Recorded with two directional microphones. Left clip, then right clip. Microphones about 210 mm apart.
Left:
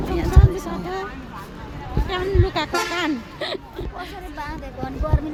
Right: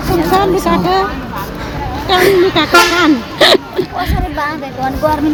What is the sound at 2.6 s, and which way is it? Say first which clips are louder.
Speech: right 11 dB; 15° left (ahead or behind).